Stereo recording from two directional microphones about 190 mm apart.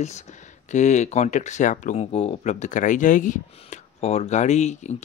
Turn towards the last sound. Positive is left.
turn(degrees=35)  # may be behind; listen again after turning